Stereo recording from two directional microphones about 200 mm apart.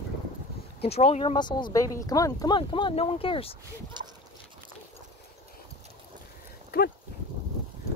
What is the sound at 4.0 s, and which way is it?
Speech, 20° right (ahead or behind).